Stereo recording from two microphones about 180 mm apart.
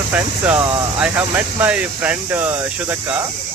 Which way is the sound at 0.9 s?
5° right (ahead or behind).